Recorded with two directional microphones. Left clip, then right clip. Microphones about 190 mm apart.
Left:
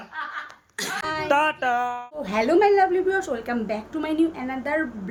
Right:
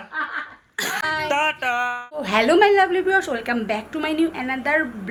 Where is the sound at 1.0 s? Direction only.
5° right (ahead or behind).